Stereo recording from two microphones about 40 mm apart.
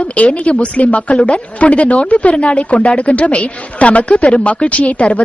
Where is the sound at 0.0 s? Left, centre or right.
Left.